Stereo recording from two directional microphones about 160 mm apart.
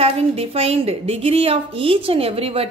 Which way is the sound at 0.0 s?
40° right (ahead or behind).